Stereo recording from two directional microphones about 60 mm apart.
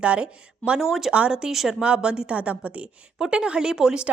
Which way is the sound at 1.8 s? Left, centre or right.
Centre.